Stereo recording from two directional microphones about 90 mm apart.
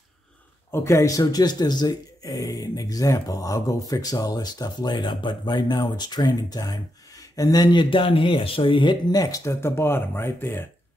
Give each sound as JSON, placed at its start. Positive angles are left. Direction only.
{"t": 0.7, "sound": "speech", "side_deg": 30}
{"t": 9.1, "sound": "speech", "side_deg": 40}